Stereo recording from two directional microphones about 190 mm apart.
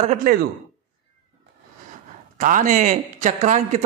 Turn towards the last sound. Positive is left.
turn(degrees=-40)  # may be behind; listen again after turning